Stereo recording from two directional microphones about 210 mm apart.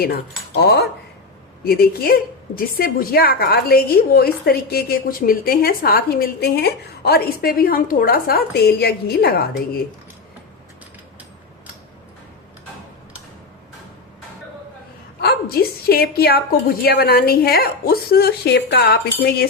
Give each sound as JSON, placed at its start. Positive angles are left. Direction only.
{"t": 0.0, "sound": "a woman's voice", "side_deg": 50}
{"t": 15.2, "sound": "a woman's voice", "side_deg": 50}